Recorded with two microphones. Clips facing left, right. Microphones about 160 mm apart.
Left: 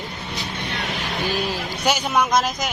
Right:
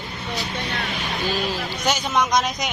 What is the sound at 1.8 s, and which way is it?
Speech, 10° left (ahead or behind).